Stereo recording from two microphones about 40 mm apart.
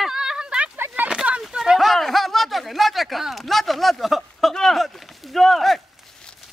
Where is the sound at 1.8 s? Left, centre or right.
Centre.